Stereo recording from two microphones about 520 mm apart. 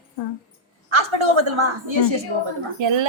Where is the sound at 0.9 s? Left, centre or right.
Right.